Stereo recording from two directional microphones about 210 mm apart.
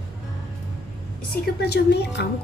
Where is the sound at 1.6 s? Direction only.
50° left (ahead or behind).